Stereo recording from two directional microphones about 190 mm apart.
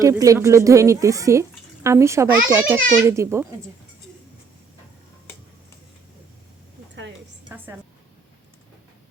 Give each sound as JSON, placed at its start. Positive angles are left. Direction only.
{"t": 0.0, "sound": "speech", "side_deg": -15}
{"t": 7.5, "sound": "a woman's voice", "side_deg": -10}